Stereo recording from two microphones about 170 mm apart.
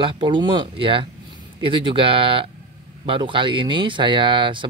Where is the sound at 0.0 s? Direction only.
30° right (ahead or behind).